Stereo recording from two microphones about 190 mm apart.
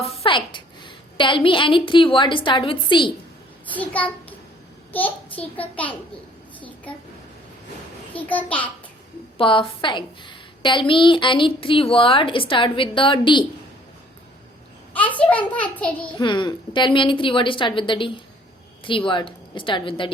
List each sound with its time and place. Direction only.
0.0 s a woman's voice: 30° left (ahead or behind)
3.7 s a child's voice: 10° left (ahead or behind)
8.3 s a child's voice: 10° left (ahead or behind)
9.4 s a woman's voice: 25° left (ahead or behind)
14.9 s a child's voice: 10° left (ahead or behind)
16.1 s a woman's voice: 25° left (ahead or behind)